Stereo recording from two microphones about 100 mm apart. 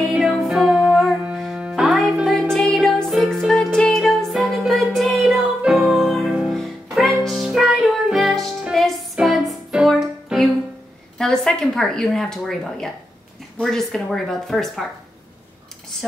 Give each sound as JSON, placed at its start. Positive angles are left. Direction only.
{"t": 0.1, "sound": "music", "side_deg": -5}
{"t": 11.1, "sound": "a woman's voice", "side_deg": 5}